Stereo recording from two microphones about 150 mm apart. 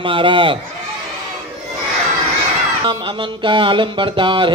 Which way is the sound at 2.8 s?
35° right (ahead or behind).